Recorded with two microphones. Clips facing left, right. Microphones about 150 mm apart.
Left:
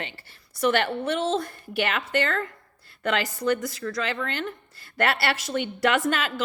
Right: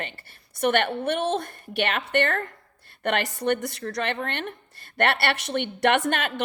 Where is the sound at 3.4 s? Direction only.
65° right (ahead or behind).